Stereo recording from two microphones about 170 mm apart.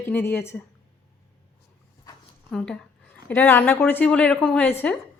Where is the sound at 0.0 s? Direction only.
15° left (ahead or behind).